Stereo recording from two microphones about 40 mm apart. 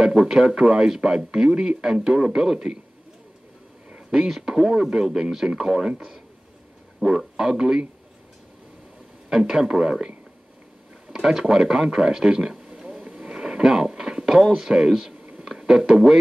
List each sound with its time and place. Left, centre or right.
0.0 s speech: centre
4.1 s speech: centre
9.3 s speech: centre
13.3 s a sound: centre
14.6 s speech: centre
15.3 s a sound: centre
15.9 s speech: centre